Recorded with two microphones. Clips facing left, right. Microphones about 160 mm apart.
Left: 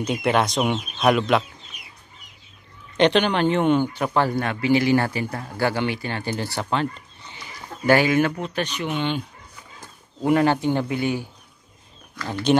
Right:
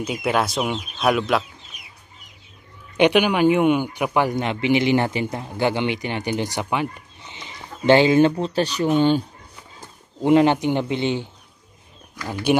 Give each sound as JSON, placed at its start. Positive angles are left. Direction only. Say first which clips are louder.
{"t": 0.0, "sound": "speech", "louder": "left 1 dB", "side_deg": -5}
{"t": 3.0, "sound": "speech", "louder": "right 2 dB", "side_deg": -10}
{"t": 10.2, "sound": "speech", "louder": "right 3 dB", "side_deg": -20}
{"t": 12.2, "sound": "speech", "louder": "even", "side_deg": -10}